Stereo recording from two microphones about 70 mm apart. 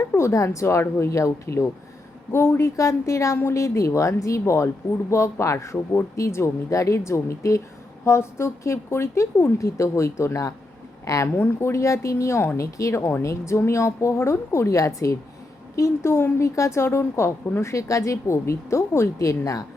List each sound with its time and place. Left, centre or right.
0.1 s a woman's voice: left
11.3 s a woman's voice: left